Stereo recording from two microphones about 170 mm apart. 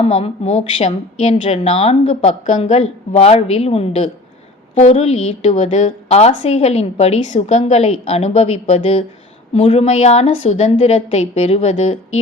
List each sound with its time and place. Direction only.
0.0 s a woman's voice: 35° left (ahead or behind)